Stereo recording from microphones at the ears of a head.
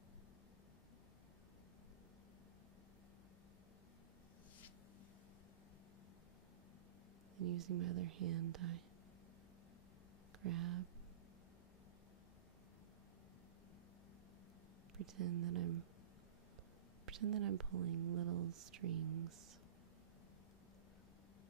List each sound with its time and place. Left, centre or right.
7.3 s speech: right
10.4 s speech: right
15.0 s speech: right
17.0 s speech: right